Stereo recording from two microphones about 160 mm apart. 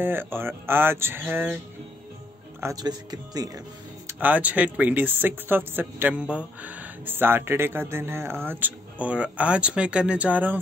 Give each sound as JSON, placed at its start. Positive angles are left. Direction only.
{"t": 0.0, "sound": "speech", "side_deg": -15}
{"t": 2.6, "sound": "speech", "side_deg": -25}
{"t": 4.1, "sound": "speech", "side_deg": -10}